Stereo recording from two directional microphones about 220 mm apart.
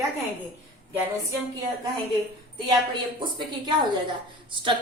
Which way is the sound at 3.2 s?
20° right (ahead or behind).